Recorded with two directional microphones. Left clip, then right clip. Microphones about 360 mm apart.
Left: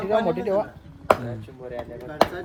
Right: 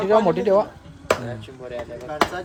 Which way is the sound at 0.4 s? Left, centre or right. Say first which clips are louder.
Right 6 dB; right.